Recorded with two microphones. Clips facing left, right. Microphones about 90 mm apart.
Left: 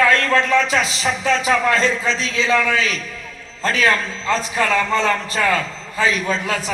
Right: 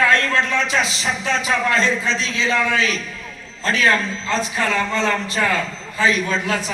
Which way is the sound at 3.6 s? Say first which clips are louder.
Even; 40° left (ahead or behind).